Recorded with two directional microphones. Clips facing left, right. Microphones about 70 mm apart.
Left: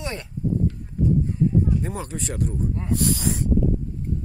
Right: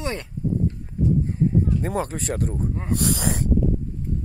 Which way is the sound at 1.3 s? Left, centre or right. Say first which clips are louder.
Even; right.